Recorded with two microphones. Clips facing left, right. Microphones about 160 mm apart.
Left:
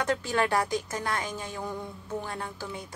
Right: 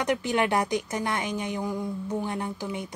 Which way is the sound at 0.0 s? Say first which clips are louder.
Right 2 dB; 20° right (ahead or behind).